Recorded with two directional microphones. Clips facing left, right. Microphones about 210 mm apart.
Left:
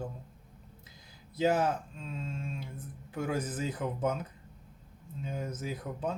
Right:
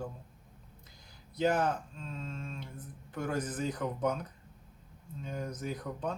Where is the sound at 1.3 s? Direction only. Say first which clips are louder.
Left 1 dB; 5° left (ahead or behind).